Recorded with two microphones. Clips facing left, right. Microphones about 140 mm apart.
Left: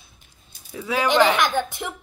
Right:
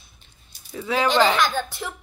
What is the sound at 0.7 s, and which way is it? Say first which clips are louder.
A woman's voice: even; 5° left (ahead or behind).